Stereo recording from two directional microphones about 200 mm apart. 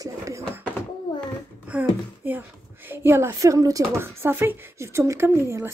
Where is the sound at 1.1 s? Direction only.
20° left (ahead or behind).